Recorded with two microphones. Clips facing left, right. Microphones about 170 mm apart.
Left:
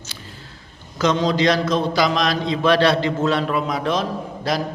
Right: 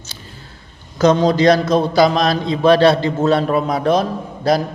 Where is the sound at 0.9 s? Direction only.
40° right (ahead or behind).